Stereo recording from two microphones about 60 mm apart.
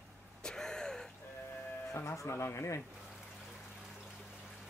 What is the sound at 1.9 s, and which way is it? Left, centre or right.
Speech, left.